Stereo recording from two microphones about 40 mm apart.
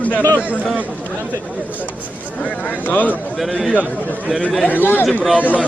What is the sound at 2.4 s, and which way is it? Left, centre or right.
Speech, left.